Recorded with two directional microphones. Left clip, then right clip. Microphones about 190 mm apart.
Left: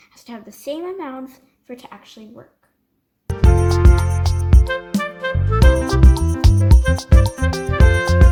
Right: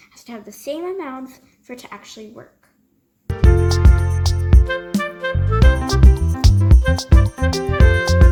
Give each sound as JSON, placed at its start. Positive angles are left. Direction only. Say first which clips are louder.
{"t": 0.0, "sound": "speech", "louder": "right 1 dB", "side_deg": 40}
{"t": 3.2, "sound": "music", "louder": "even", "side_deg": 0}